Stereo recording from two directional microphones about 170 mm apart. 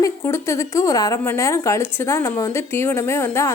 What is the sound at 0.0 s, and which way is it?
Speech, 15° left (ahead or behind).